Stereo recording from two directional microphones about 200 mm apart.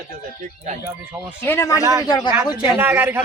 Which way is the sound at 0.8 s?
10° right (ahead or behind).